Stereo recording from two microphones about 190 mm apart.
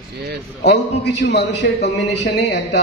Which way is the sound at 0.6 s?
65° left (ahead or behind).